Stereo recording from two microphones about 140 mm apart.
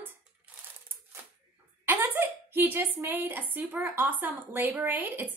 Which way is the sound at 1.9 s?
15° right (ahead or behind).